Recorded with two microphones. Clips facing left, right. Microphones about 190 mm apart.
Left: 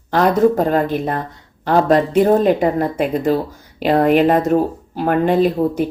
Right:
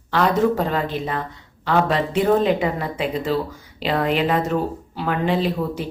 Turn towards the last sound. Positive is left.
turn(degrees=50)  # may be behind; listen again after turning